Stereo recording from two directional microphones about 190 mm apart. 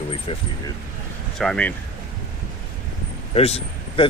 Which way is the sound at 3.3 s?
30° left (ahead or behind).